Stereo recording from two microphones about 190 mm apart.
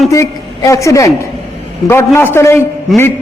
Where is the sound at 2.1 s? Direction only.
15° left (ahead or behind).